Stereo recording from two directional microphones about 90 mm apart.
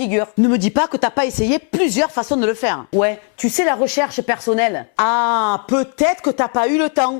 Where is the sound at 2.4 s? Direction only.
15° left (ahead or behind).